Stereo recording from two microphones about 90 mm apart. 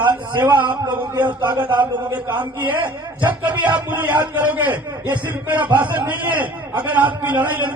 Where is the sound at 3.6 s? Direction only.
20° right (ahead or behind).